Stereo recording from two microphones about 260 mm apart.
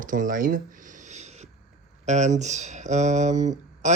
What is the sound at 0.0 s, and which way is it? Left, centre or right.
Speech, right.